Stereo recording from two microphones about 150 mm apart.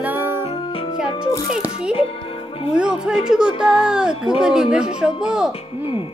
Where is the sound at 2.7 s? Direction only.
5° right (ahead or behind).